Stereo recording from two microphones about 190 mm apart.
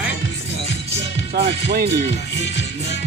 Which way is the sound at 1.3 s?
55° right (ahead or behind).